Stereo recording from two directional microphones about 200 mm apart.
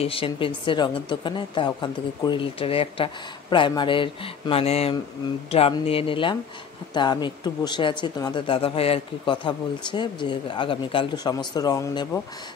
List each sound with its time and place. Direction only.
0.0 s speech: 25° left (ahead or behind)